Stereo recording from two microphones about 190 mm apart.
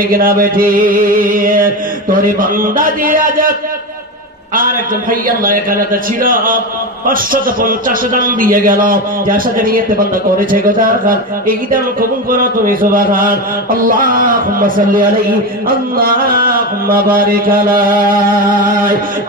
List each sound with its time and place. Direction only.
0.1 s chant: 50° right (ahead or behind)
5.4 s chant: 45° right (ahead or behind)
7.6 s chant: 45° right (ahead or behind)